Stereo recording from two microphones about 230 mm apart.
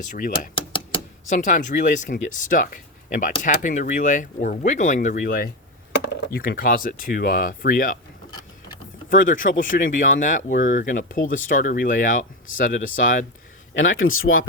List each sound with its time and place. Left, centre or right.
0.1 s speech: left
9.0 s speech: left
13.7 s speech: left